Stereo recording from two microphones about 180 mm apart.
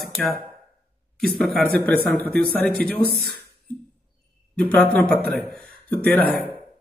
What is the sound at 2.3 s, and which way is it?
Speech, 60° right (ahead or behind).